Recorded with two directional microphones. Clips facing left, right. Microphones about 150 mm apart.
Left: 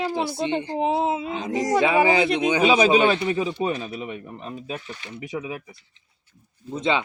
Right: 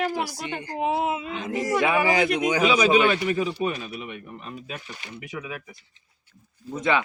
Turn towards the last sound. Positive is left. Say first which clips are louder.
# even
turn(degrees=25)  # may be behind; listen again after turning